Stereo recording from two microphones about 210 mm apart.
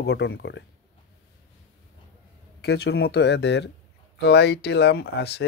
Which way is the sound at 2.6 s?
50° left (ahead or behind).